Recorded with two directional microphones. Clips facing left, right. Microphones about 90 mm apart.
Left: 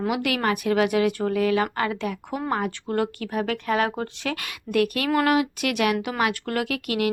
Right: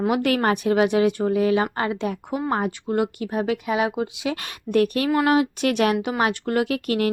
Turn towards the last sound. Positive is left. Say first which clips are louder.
# right 4 dB
turn(degrees=-30)  # may be behind; listen again after turning